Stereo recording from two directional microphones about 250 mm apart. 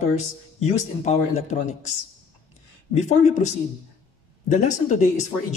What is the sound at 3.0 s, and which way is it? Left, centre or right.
Speech, left.